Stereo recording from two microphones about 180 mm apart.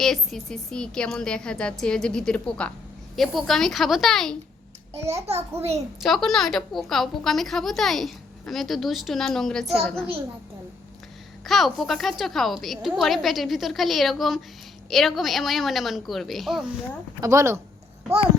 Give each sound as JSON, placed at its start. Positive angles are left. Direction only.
{"t": 0.0, "sound": "a woman's voice", "side_deg": 0}
{"t": 4.9, "sound": "a woman's voice", "side_deg": -15}
{"t": 6.0, "sound": "a woman's voice", "side_deg": 0}
{"t": 11.4, "sound": "a woman's voice", "side_deg": 0}
{"t": 17.2, "sound": "a woman's voice", "side_deg": -15}